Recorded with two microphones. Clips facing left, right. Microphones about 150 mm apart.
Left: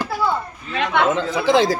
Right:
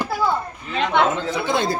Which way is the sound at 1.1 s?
90° left.